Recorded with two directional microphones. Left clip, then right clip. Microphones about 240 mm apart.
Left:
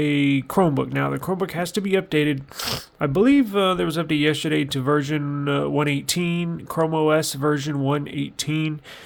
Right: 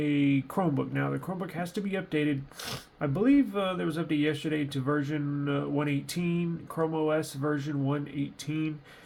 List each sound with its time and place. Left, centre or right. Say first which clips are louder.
0.0 s speech: left 6 dB; left